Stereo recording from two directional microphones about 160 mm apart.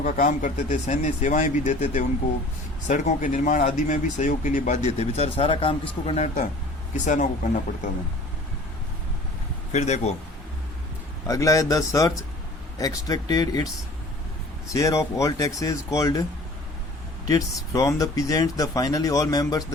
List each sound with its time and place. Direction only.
0.0 s speech: 55° left (ahead or behind)
4.9 s a man's voice: 40° left (ahead or behind)
9.7 s speech: 45° left (ahead or behind)
11.3 s speech: 20° left (ahead or behind)
14.7 s speech: 20° left (ahead or behind)
17.2 s speech: 20° left (ahead or behind)